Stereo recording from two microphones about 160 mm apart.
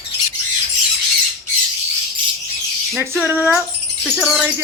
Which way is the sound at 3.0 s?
10° right (ahead or behind).